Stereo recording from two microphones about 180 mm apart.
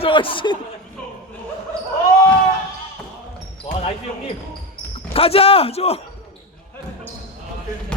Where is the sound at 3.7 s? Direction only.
35° left (ahead or behind).